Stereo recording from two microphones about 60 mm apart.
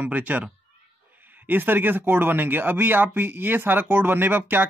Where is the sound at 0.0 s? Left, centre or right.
Right.